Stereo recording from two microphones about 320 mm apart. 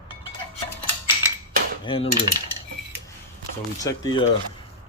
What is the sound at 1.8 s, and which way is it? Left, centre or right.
Cutlery, centre.